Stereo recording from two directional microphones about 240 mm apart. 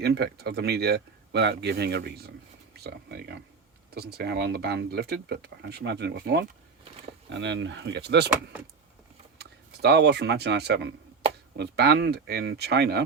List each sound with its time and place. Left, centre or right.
0.0 s speech: right
9.4 s speech: right